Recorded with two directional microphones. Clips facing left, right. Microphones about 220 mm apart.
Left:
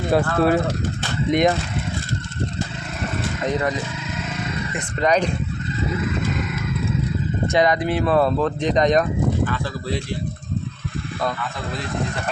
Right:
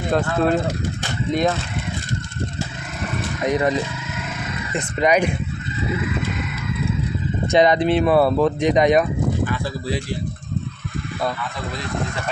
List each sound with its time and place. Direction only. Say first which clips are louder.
0.1 s speech: left 1 dB; 5° left (ahead or behind)
1.3 s speech: left 2 dB; 15° left (ahead or behind)
3.4 s speech: right 4 dB; 15° right (ahead or behind)
4.9 s speech: right 1 dB; 10° right (ahead or behind)
7.5 s speech: right 4 dB; 25° right (ahead or behind)
8.0 s speech: even; 10° right (ahead or behind)